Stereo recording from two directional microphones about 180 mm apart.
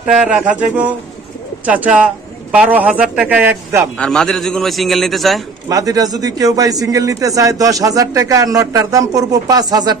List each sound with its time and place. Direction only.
0.1 s a man's voice: 5° right (ahead or behind)
4.0 s a man's voice: 5° left (ahead or behind)
5.7 s speech: 20° right (ahead or behind)